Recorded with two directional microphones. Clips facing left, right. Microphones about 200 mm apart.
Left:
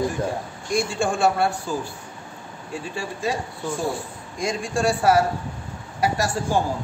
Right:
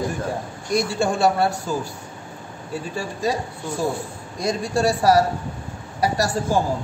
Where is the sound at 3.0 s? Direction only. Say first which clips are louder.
Right 2 dB; 40° right (ahead or behind).